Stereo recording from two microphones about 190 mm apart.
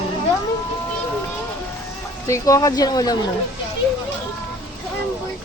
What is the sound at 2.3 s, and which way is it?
Speech, 15° left (ahead or behind).